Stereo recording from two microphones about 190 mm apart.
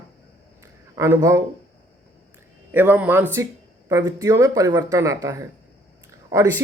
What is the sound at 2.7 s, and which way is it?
Speech, 10° right (ahead or behind).